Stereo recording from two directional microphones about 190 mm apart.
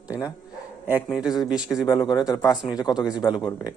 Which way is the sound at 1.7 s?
20° left (ahead or behind).